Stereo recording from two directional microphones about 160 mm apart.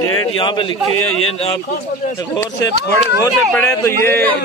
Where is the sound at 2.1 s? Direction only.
25° left (ahead or behind).